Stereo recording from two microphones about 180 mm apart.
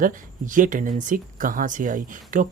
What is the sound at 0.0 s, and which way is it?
Speech, 45° right (ahead or behind).